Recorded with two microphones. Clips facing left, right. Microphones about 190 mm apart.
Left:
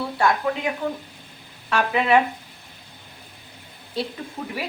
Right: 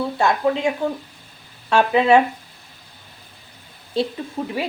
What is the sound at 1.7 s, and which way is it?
Speech, 25° right (ahead or behind).